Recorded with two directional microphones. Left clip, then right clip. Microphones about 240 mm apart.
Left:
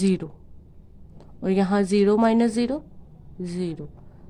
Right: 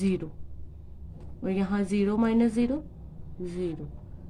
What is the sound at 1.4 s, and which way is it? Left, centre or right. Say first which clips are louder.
A woman's voice: left 8 dB; left.